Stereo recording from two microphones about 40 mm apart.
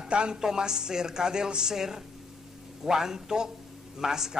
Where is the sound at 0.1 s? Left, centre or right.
Right.